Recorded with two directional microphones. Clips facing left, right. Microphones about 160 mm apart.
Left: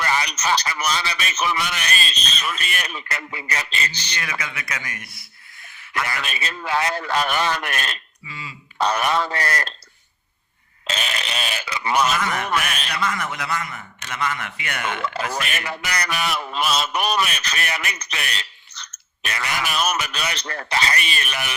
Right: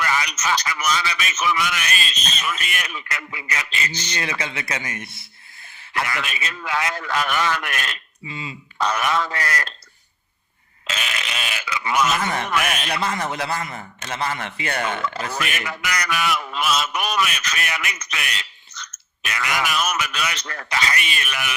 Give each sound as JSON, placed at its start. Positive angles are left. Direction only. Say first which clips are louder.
{"t": 0.0, "sound": "honk", "louder": "left 1 dB", "side_deg": 30}
{"t": 4.1, "sound": "speech", "louder": "right 3 dB", "side_deg": -25}
{"t": 6.1, "sound": "honk", "louder": "even", "side_deg": 30}
{"t": 8.3, "sound": "speech", "louder": "right 4 dB", "side_deg": -20}
{"t": 8.8, "sound": "honk", "louder": "left 1 dB", "side_deg": 35}
{"t": 10.8, "sound": "honk", "louder": "left 2 dB", "side_deg": 35}
{"t": 12.2, "sound": "a man's voice", "louder": "right 1 dB", "side_deg": -30}
{"t": 15.3, "sound": "honk", "louder": "even", "side_deg": 30}